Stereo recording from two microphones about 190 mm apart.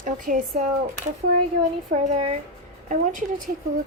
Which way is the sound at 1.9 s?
30° right (ahead or behind).